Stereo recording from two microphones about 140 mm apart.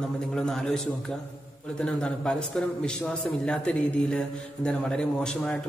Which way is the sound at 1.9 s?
5° left (ahead or behind).